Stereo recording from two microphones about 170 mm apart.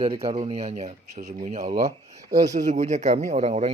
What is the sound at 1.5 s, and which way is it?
Speech, 65° right (ahead or behind).